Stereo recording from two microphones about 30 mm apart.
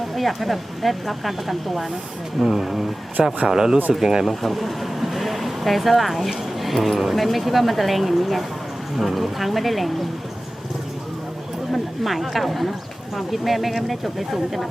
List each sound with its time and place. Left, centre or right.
0.2 s speech: centre
4.3 s speech: centre
11.7 s speech: centre